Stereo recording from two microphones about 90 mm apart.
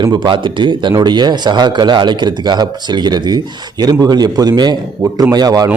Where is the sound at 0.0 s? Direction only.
60° right (ahead or behind).